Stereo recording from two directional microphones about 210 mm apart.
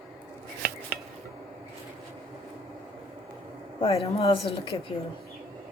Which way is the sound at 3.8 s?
30° left (ahead or behind).